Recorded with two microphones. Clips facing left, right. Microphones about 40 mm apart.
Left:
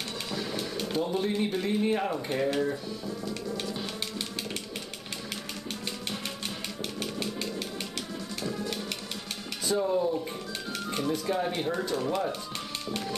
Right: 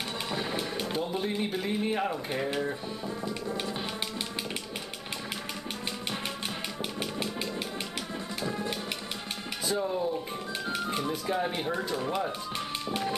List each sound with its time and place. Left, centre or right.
0.3 s printer: right
0.7 s speech: centre
3.3 s music: right
7.0 s a sound: centre
8.4 s music: centre
9.7 s speech: centre
10.7 s speech: centre